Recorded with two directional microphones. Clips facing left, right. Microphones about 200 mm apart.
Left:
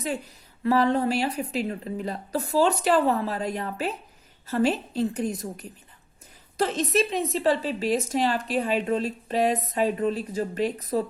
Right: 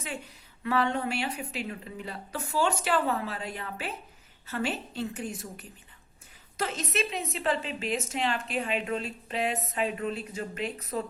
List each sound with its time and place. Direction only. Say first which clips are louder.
0.6 s a woman's voice: left 6 dB; 35° left (ahead or behind)